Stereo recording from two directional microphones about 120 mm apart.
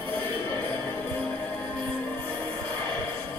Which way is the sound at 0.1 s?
15° left (ahead or behind).